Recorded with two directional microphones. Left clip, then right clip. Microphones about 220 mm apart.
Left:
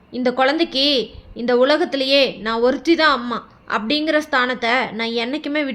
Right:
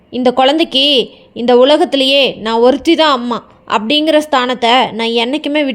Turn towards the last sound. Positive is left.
turn(degrees=-25)  # may be behind; listen again after turning